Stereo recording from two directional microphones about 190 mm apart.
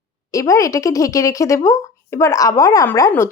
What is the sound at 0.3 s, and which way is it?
Speech, 15° left (ahead or behind).